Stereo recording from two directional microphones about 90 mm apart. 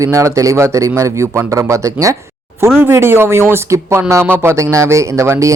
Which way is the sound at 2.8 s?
25° right (ahead or behind).